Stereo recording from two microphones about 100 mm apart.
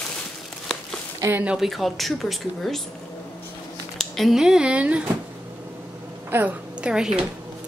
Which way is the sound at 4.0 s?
Centre (ahead or behind).